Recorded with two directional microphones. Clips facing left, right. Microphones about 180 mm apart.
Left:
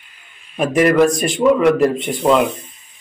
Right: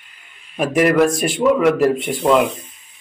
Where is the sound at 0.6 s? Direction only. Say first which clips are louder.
Left 1 dB; 5° right (ahead or behind).